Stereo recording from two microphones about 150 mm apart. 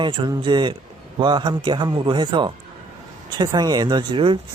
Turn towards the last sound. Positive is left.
turn(degrees=-35)  # may be behind; listen again after turning